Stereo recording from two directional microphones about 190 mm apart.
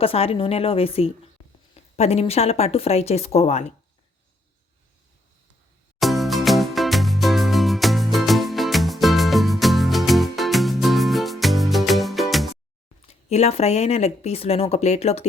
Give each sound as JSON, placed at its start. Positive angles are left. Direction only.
{"t": 0.0, "sound": "speech", "side_deg": 30}
{"t": 6.0, "sound": "music", "side_deg": 0}
{"t": 13.2, "sound": "speech", "side_deg": 35}